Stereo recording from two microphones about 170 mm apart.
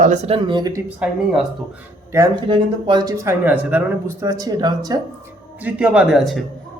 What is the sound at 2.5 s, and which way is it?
Speech, 25° right (ahead or behind).